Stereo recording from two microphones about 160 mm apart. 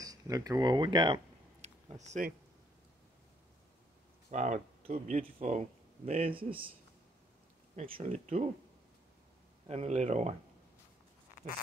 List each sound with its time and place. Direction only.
0.0 s speech: 25° right (ahead or behind)
2.0 s speech: 45° right (ahead or behind)
4.3 s speech: 45° right (ahead or behind)
7.7 s speech: 45° right (ahead or behind)
9.7 s speech: 45° right (ahead or behind)